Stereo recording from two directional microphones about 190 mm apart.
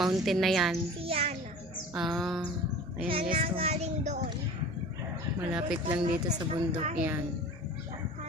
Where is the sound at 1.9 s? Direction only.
Centre (ahead or behind).